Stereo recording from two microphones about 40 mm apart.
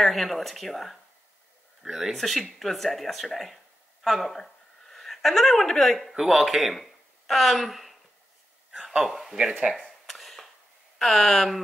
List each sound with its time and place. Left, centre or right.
0.0 s speech: centre
1.8 s speech: centre
4.4 s a sound: centre
6.1 s speech: centre
9.1 s speech: centre
9.4 s speech: right
10.0 s a sound: centre
11.0 s speech: centre